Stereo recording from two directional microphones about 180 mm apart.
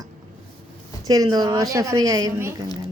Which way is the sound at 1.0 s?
20° right (ahead or behind).